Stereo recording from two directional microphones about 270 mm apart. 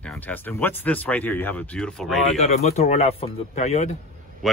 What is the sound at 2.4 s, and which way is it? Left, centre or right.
Speech, left.